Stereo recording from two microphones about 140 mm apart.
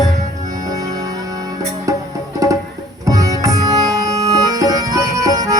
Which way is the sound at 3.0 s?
25° right (ahead or behind).